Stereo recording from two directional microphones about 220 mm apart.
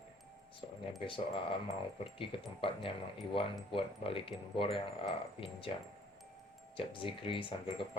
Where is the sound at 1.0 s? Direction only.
25° left (ahead or behind).